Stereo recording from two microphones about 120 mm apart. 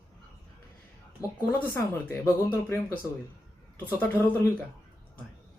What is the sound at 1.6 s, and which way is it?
A man's voice, 15° left (ahead or behind).